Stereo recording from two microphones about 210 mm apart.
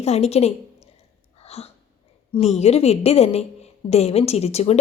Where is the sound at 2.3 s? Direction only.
30° left (ahead or behind).